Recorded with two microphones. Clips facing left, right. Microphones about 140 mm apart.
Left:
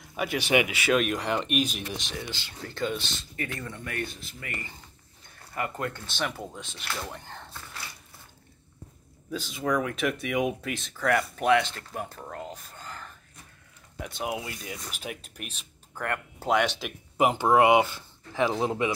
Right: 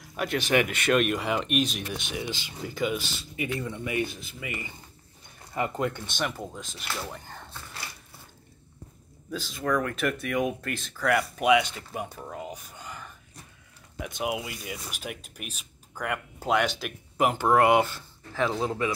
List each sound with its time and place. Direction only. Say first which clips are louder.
0.0 s speech: right 1 dB; 5° left (ahead or behind)
5.5 s speech: right 3 dB; 20° right (ahead or behind)
6.3 s speech: right 1 dB; 5° left (ahead or behind)
9.3 s speech: even; centre (ahead or behind)
14.1 s speech: right 2 dB; 5° right (ahead or behind)
17.3 s speech: left 1 dB; 10° left (ahead or behind)